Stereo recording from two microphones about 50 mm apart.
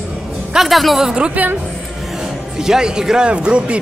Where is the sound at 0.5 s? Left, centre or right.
Centre.